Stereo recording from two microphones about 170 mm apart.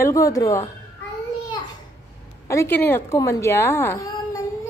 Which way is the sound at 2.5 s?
15° left (ahead or behind).